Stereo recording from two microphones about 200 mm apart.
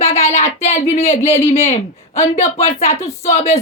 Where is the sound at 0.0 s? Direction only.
30° left (ahead or behind).